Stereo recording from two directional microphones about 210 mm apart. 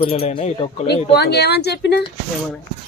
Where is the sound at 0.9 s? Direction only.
50° left (ahead or behind).